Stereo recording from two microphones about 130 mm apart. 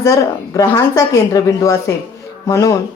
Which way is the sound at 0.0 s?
25° left (ahead or behind).